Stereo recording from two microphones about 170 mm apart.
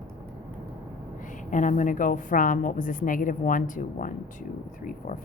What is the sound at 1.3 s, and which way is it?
A woman's voice, 50° left (ahead or behind).